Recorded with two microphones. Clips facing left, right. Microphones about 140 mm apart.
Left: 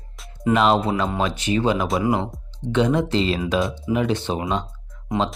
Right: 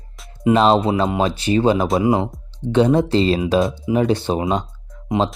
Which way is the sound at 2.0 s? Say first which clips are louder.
Right 4 dB; 15° right (ahead or behind).